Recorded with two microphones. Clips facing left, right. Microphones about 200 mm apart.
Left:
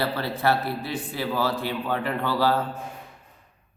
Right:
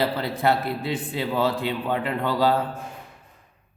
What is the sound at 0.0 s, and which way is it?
Speech, 15° right (ahead or behind).